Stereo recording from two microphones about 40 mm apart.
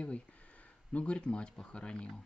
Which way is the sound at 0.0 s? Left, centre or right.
Left.